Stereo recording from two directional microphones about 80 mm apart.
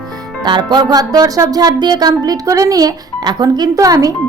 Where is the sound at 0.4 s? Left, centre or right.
Right.